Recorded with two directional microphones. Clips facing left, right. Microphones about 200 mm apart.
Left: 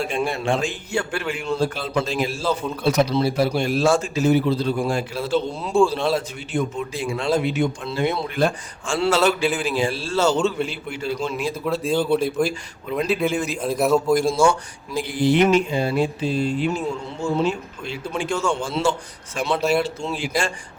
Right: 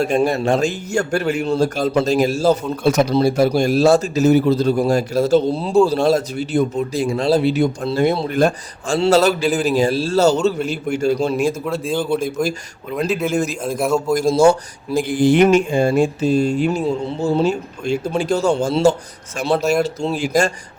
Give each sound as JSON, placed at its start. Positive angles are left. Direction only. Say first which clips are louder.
{"t": 0.0, "sound": "a man's voice", "louder": "right 7 dB", "side_deg": -40}
{"t": 11.6, "sound": "a man's voice", "louder": "even", "side_deg": 0}
{"t": 13.3, "sound": "speech", "louder": "right 5 dB", "side_deg": -45}
{"t": 13.6, "sound": "a man's voice", "louder": "even", "side_deg": 0}
{"t": 14.2, "sound": "a man's voice", "louder": "right 5 dB", "side_deg": -40}